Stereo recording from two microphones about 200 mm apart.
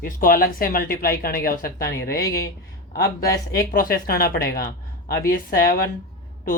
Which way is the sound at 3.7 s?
45° left (ahead or behind).